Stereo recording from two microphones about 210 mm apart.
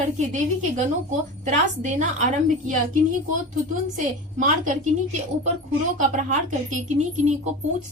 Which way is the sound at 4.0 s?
35° right (ahead or behind).